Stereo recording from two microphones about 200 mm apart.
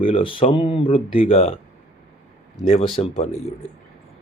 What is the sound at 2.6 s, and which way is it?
Speech, 30° left (ahead or behind).